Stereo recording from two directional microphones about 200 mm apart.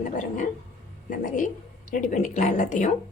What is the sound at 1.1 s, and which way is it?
A woman's voice, 40° left (ahead or behind).